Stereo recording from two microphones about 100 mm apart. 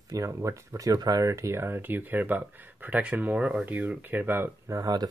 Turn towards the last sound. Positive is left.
turn(degrees=-40)  # may be behind; listen again after turning